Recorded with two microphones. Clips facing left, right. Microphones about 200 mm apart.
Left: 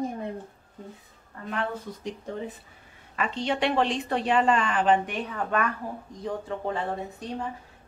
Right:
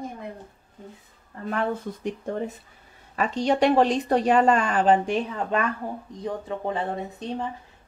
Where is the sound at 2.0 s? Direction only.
50° right (ahead or behind).